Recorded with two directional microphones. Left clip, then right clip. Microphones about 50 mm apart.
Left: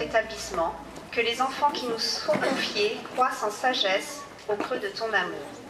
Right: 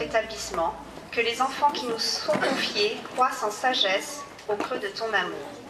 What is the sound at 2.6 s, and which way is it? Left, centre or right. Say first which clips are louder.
Speech: right 1 dB; right.